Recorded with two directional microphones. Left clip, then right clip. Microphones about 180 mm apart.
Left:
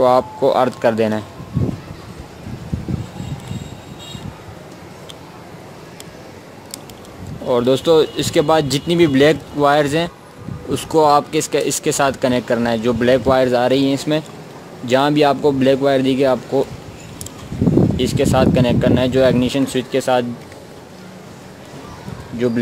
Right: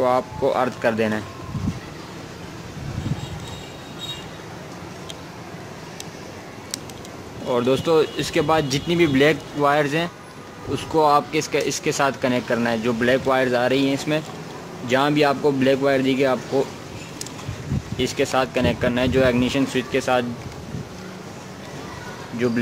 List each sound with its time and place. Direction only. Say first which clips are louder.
0.0 s speech: left 6 dB; 35° left (ahead or behind)
7.4 s speech: left 5 dB; 30° left (ahead or behind)
17.9 s speech: left 5 dB; 30° left (ahead or behind)
22.4 s speech: left 4 dB; 25° left (ahead or behind)